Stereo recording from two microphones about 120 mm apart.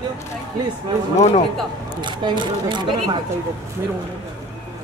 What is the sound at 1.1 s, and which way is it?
Speech, 65° left (ahead or behind).